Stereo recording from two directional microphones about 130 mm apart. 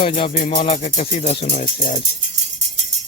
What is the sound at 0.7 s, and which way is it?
Speech, 55° left (ahead or behind).